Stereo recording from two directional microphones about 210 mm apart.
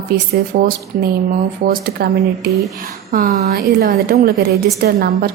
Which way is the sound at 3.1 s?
40° right (ahead or behind).